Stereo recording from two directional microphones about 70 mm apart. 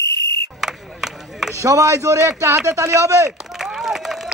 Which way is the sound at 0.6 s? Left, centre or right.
Centre.